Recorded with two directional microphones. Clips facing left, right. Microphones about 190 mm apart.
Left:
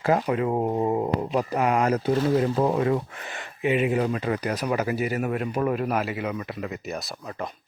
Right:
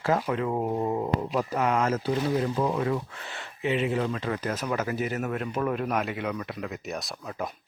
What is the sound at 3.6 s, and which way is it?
Speech, 15° left (ahead or behind).